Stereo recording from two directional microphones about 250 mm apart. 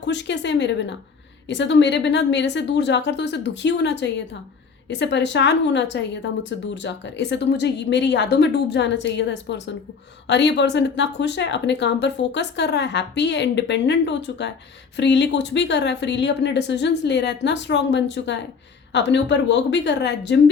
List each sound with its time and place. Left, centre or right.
0.0 s speech: left